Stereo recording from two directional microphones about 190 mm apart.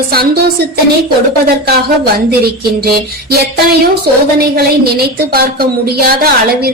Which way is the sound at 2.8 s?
55° right (ahead or behind).